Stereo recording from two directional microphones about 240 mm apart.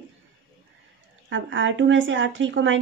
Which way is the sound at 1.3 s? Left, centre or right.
Right.